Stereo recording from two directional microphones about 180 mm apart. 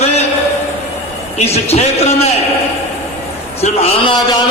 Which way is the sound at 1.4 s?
35° left (ahead or behind).